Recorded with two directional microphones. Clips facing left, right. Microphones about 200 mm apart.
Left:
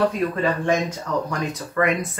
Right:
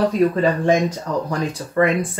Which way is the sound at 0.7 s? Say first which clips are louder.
Right 4 dB; 35° right (ahead or behind).